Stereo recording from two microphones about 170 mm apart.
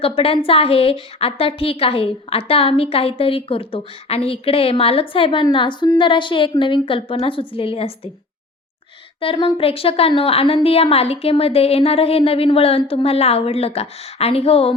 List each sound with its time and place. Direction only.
0.0 s a woman's voice: 35° left (ahead or behind)
9.2 s a woman's voice: 30° left (ahead or behind)